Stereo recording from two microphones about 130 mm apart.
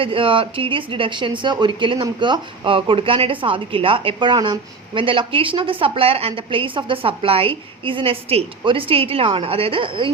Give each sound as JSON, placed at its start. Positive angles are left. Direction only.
{"t": 0.0, "sound": "a woman's voice", "side_deg": -45}